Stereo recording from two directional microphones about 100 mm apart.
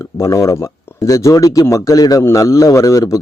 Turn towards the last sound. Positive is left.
turn(degrees=35)  # may be behind; listen again after turning